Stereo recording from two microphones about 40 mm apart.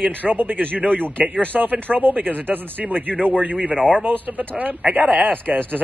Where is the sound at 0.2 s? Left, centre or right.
Right.